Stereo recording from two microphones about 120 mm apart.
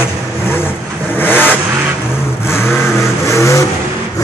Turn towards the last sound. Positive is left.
turn(degrees=25)  # may be behind; listen again after turning